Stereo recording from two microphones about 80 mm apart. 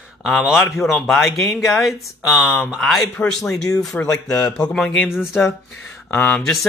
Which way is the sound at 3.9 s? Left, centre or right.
Left.